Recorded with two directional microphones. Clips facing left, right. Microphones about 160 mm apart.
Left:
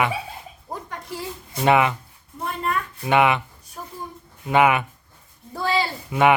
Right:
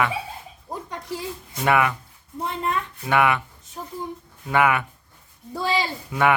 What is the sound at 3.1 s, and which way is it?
Speech, 20° left (ahead or behind).